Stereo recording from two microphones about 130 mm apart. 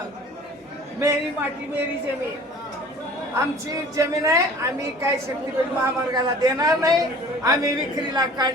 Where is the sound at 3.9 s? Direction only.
25° right (ahead or behind).